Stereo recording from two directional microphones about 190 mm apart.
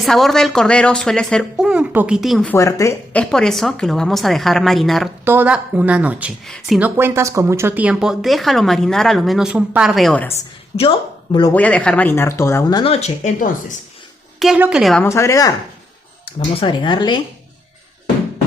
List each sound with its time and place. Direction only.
0.0 s speech: centre (ahead or behind)
2.6 s speech: 15° left (ahead or behind); by 5.0 s centre (ahead or behind)
5.2 s a woman's voice: 10° right (ahead or behind)
10.8 s speech: 25° left (ahead or behind)
11.5 s speech: 5° left (ahead or behind); by 13.7 s 40° left (ahead or behind)
14.3 s speech: 5° right (ahead or behind)
15.0 s speech: 15° left (ahead or behind)